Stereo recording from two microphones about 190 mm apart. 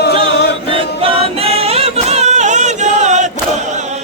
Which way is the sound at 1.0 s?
30° right (ahead or behind).